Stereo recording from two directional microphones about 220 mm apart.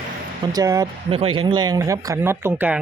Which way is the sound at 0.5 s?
15° right (ahead or behind).